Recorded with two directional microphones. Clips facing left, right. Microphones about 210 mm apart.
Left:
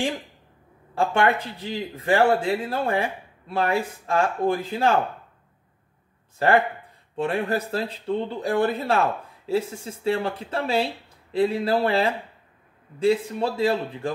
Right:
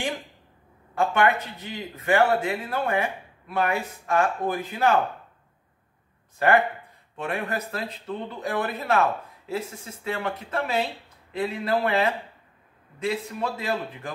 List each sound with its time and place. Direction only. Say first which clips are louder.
0.9 s speech: left 1 dB; 30° left (ahead or behind)
6.4 s a man's voice: left 1 dB; 30° left (ahead or behind)